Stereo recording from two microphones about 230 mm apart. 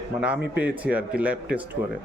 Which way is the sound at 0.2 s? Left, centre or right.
Centre.